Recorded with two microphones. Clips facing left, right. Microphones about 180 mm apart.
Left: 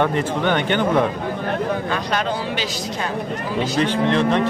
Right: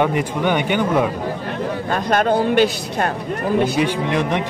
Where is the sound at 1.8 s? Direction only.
50° right (ahead or behind).